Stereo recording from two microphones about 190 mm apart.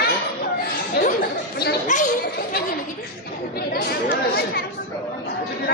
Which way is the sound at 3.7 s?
55° left (ahead or behind).